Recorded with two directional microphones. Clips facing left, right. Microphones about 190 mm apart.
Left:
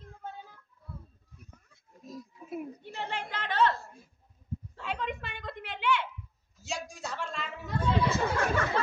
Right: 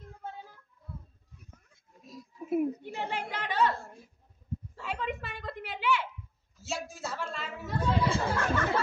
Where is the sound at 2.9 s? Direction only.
10° right (ahead or behind).